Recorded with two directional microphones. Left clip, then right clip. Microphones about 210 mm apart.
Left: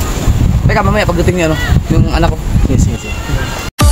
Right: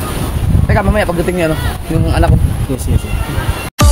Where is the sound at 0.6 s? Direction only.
25° left (ahead or behind).